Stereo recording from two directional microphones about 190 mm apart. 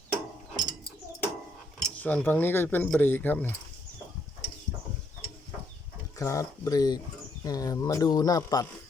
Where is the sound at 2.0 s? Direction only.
10° left (ahead or behind).